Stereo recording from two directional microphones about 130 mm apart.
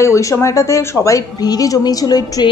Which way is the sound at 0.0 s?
25° left (ahead or behind).